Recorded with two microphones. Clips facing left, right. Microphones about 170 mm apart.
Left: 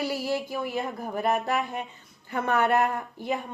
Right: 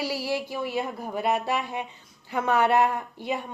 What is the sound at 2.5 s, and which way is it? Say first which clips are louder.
Speech: right 2 dB; 55° left (ahead or behind).